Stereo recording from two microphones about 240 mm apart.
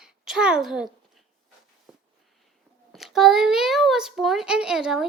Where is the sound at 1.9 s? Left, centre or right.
Centre.